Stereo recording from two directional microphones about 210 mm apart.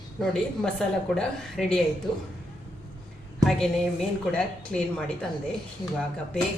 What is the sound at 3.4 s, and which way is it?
A woman's voice, centre (ahead or behind).